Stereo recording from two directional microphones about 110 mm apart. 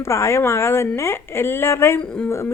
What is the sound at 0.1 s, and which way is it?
A woman's voice, 25° left (ahead or behind).